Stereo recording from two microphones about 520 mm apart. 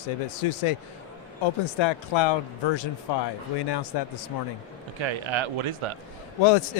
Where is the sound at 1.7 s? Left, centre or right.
Left.